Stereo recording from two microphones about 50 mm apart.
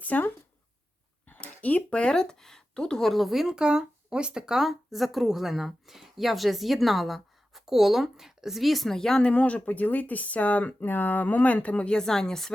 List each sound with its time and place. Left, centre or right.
0.0 s speech: left
1.4 s speech: left; by 3.5 s centre
3.5 s speech: centre
9.2 s speech: left
11.9 s speech: centre